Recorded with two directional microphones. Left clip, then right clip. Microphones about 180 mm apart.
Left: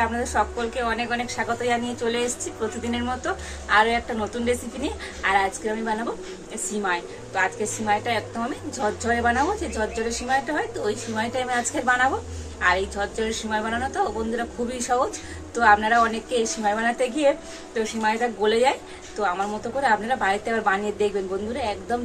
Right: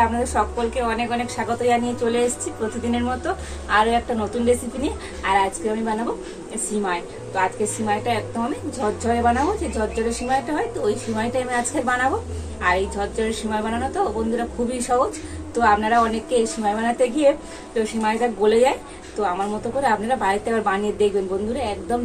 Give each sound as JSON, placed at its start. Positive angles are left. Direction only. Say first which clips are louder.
{"t": 0.0, "sound": "a woman's voice", "louder": "right 3 dB", "side_deg": 0}
{"t": 3.6, "sound": "a woman's voice", "louder": "right 1 dB", "side_deg": 5}